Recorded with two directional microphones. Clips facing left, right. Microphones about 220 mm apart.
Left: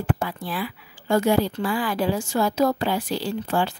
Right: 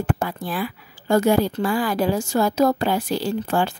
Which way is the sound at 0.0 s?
45° right (ahead or behind).